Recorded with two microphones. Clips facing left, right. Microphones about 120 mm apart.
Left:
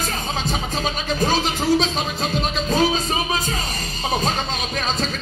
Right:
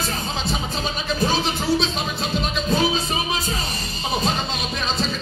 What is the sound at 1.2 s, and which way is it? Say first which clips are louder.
Speech: left 2 dB; 40° left (ahead or behind).